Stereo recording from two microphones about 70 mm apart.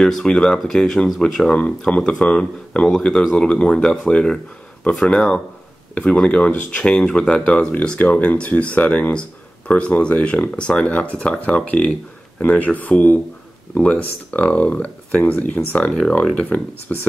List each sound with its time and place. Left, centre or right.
0.0 s speech: centre
16.5 s speech: left